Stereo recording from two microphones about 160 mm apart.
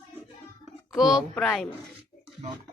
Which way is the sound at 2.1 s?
20° left (ahead or behind).